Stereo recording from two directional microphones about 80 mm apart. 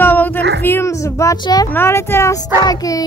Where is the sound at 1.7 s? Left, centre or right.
Left.